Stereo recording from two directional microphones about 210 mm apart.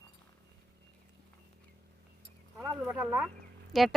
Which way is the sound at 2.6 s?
10° right (ahead or behind).